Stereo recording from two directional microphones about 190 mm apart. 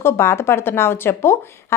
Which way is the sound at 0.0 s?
15° left (ahead or behind).